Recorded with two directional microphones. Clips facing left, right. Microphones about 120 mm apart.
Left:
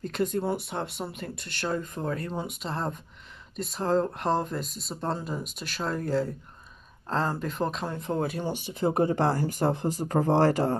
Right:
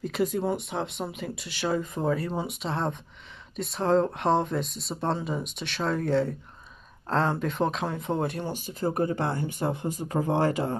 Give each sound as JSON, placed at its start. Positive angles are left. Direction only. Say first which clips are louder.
{"t": 0.0, "sound": "speech", "louder": "right 1 dB", "side_deg": -5}
{"t": 8.7, "sound": "speech", "louder": "left 2 dB", "side_deg": 20}